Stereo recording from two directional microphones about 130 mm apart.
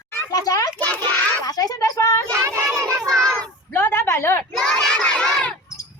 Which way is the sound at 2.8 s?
25° right (ahead or behind).